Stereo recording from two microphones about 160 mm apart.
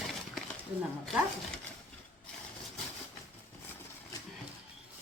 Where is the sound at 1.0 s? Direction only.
5° left (ahead or behind).